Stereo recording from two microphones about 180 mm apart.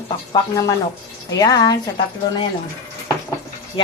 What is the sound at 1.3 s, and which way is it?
Speech, 20° left (ahead or behind).